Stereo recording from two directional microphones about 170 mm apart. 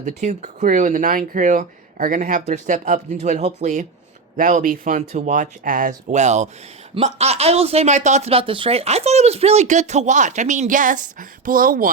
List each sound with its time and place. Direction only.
0.0 s speech: 45° right (ahead or behind)